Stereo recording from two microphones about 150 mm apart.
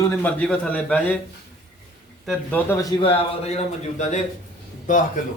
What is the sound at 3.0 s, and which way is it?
A man's voice, 40° left (ahead or behind).